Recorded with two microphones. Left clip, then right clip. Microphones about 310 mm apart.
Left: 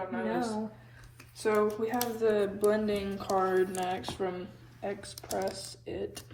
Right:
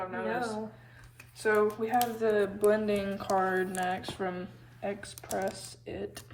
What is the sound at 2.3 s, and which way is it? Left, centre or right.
Speech, right.